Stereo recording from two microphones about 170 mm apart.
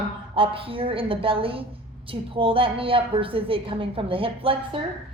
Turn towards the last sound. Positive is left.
turn(degrees=-30)  # may be behind; listen again after turning